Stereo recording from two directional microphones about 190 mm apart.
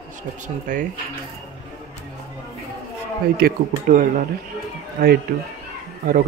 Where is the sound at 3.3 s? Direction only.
50° right (ahead or behind).